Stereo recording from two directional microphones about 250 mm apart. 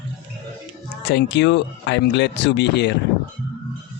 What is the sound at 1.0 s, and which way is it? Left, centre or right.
Speech, left.